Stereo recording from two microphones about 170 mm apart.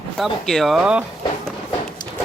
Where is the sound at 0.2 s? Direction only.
Centre (ahead or behind).